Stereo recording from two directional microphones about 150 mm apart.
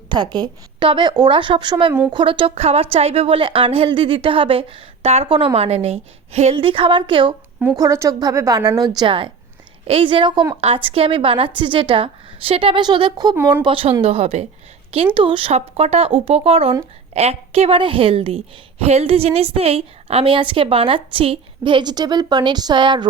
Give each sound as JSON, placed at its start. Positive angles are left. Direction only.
{"t": 0.1, "sound": "a woman's voice", "side_deg": -30}
{"t": 7.8, "sound": "a woman's voice", "side_deg": -20}